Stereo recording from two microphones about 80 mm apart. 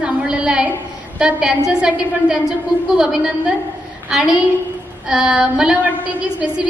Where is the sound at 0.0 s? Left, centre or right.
Centre.